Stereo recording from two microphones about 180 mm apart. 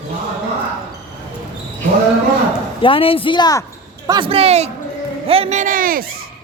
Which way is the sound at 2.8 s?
30° left (ahead or behind).